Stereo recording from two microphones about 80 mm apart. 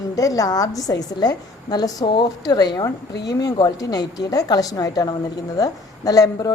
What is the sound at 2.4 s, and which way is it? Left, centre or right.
A woman's voice, left.